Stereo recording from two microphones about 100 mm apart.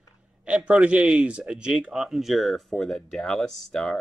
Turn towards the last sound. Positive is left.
turn(degrees=5)  # may be behind; listen again after turning